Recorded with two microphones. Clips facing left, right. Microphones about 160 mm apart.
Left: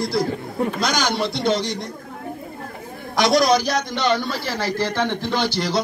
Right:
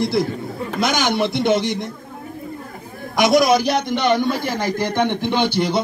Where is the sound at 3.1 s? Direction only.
20° right (ahead or behind).